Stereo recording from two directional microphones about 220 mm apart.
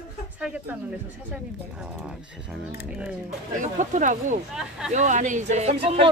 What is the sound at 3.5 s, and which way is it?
Speech, 35° right (ahead or behind).